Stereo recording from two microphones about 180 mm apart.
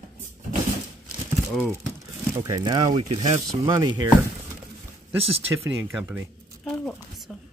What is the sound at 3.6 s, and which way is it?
Rub, 25° right (ahead or behind).